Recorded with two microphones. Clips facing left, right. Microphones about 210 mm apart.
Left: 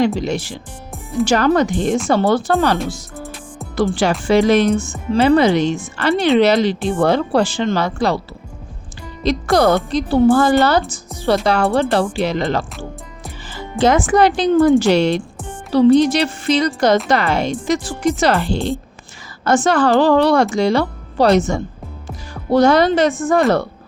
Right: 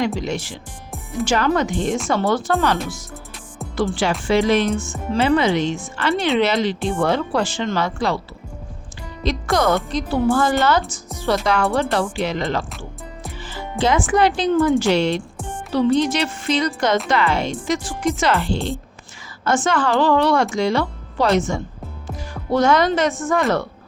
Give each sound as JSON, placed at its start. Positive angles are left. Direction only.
{"t": 0.2, "sound": "a woman's voice", "side_deg": 35}
{"t": 4.3, "sound": "a woman's voice", "side_deg": 40}
{"t": 9.2, "sound": "a woman's voice", "side_deg": 35}
{"t": 13.8, "sound": "a woman's voice", "side_deg": 40}